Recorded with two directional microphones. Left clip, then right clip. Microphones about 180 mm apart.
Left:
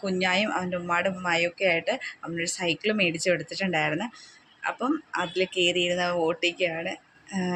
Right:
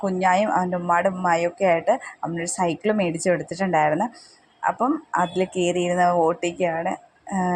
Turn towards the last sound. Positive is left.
turn(degrees=-5)  # may be behind; listen again after turning